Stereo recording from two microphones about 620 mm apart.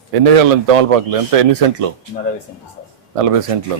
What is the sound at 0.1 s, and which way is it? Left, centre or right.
A man's voice, right.